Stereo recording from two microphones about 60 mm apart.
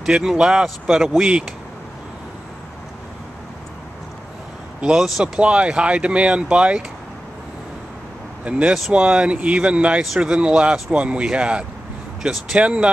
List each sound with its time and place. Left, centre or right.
0.0 s speech: centre
4.8 s speech: centre
5.2 s speech: centre
8.5 s speech: centre
12.2 s speech: centre
12.5 s speech: centre